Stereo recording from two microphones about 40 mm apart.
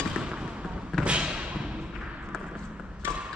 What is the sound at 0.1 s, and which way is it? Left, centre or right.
Basketball bounce, right.